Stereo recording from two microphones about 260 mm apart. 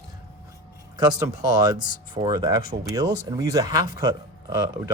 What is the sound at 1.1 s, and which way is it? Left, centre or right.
Speech, centre.